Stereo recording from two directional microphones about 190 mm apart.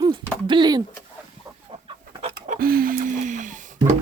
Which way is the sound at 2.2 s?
40° right (ahead or behind).